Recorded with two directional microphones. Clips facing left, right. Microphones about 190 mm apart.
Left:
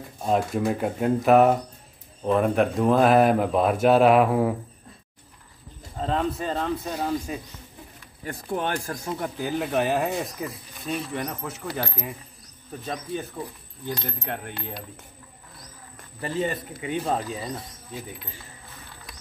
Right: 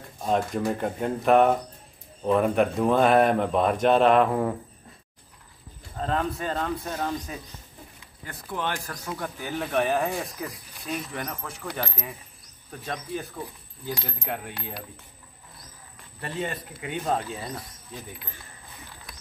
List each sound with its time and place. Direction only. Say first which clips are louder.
0.2 s speech: left 2 dB; 5° left (ahead or behind)
5.9 s speech: left 2 dB; centre (ahead or behind)
6.9 s speech: left 3 dB; 10° left (ahead or behind)
8.5 s a man's voice: left 3 dB; 45° left (ahead or behind)
8.8 s a man's voice: left 4 dB; 25° left (ahead or behind)
9.6 s speech: even; centre (ahead or behind)
16.2 s speech: left 4 dB; centre (ahead or behind)